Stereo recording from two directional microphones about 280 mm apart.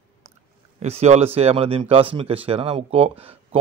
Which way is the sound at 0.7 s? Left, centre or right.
Right.